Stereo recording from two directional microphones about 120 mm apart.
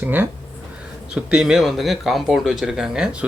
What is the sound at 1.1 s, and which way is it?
Speech, 5° right (ahead or behind).